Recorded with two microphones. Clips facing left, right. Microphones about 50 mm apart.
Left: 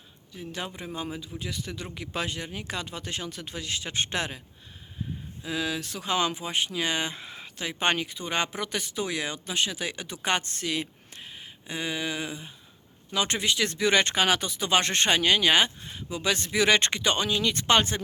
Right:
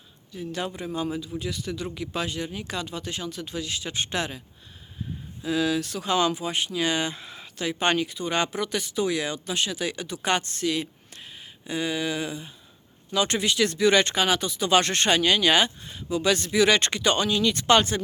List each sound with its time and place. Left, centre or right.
0.3 s a man's voice: centre; by 4.4 s left
5.4 s speech: centre; by 14.7 s left
14.7 s speech: left
17.4 s speech: left